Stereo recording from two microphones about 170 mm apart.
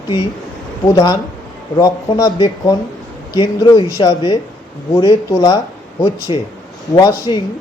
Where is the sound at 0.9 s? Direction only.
20° left (ahead or behind).